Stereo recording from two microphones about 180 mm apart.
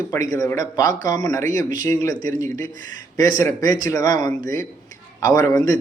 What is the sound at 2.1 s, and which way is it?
Speech, 45° right (ahead or behind).